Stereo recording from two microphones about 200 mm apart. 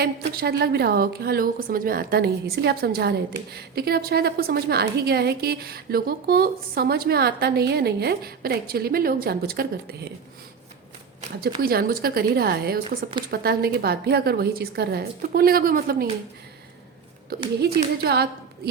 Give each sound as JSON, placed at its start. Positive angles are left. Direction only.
{"t": 0.0, "sound": "a woman's voice", "side_deg": -50}
{"t": 11.6, "sound": "a woman's voice", "side_deg": -50}
{"t": 17.3, "sound": "a woman's voice", "side_deg": -50}